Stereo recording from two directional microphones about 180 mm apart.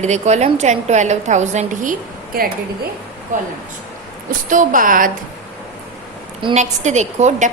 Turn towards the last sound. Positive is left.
turn(degrees=-40)  # may be behind; listen again after turning